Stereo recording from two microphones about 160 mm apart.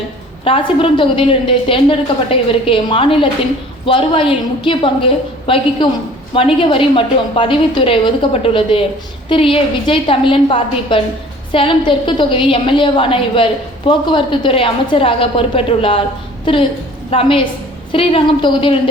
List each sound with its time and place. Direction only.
0.4 s a woman's voice: 35° left (ahead or behind)
17.1 s a woman's voice: 35° left (ahead or behind)